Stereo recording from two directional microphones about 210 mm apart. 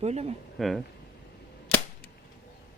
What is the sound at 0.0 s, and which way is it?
Speech, 30° right (ahead or behind).